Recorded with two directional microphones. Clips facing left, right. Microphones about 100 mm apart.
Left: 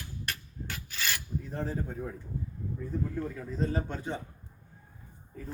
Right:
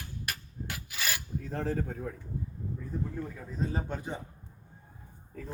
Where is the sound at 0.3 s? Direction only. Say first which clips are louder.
Even; 10° right (ahead or behind).